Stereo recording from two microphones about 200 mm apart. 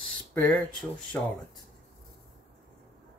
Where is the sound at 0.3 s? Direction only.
10° left (ahead or behind).